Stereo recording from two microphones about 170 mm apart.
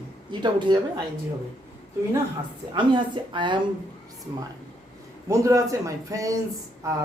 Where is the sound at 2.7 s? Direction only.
30° right (ahead or behind).